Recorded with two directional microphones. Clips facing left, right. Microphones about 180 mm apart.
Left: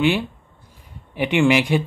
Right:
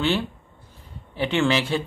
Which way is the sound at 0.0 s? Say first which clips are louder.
Left 4 dB; 15° left (ahead or behind).